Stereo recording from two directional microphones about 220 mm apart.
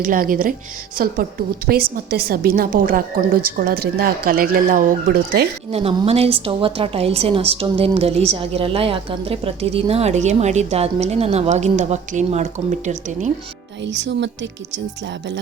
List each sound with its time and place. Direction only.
0.0 s a woman's voice: 40° right (ahead or behind)
5.7 s a woman's voice: 25° right (ahead or behind)
13.8 s a woman's voice: 55° right (ahead or behind)